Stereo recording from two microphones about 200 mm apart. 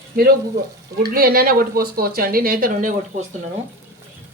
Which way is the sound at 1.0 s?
50° right (ahead or behind).